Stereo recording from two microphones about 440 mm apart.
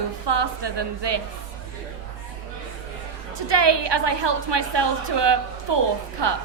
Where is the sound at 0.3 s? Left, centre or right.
Right.